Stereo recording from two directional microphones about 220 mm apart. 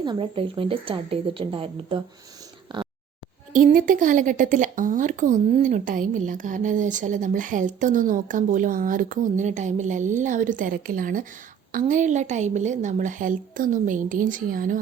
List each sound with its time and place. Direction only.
0.0 s speech: 20° right (ahead or behind)
2.7 s dog: 20° right (ahead or behind)
3.5 s speech: 35° right (ahead or behind)